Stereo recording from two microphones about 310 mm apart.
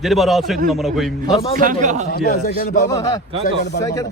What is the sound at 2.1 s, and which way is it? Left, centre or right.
Speech, left.